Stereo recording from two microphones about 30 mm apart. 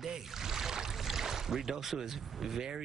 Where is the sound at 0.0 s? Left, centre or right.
Centre.